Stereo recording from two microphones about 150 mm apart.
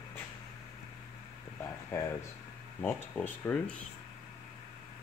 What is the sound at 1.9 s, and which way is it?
Speech, 15° left (ahead or behind).